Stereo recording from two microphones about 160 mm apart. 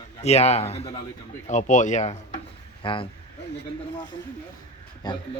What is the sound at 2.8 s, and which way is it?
Speech, 35° left (ahead or behind).